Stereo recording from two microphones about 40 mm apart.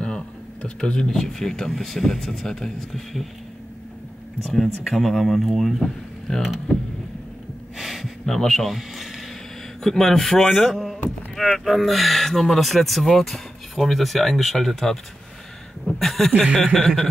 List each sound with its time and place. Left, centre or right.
0.7 s speech: left
1.0 s speech: centre
4.4 s speech: centre
6.3 s speech: centre
7.7 s a sound: centre
8.3 s speech: centre
8.6 s a sound: centre
9.8 s speech: centre
10.8 s a sound: centre
11.5 s speech: centre
16.0 s speech: centre